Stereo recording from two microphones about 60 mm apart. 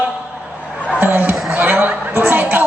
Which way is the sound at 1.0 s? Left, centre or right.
Right.